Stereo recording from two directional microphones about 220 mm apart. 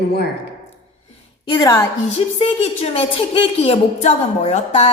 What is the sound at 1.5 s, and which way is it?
Speech, 15° left (ahead or behind).